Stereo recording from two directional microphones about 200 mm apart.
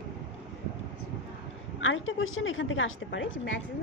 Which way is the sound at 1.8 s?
75° left (ahead or behind).